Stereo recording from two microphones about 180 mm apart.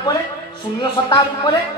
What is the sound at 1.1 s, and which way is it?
Speech, 25° left (ahead or behind).